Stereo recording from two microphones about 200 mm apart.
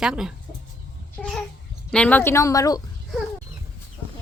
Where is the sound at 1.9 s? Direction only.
5° left (ahead or behind).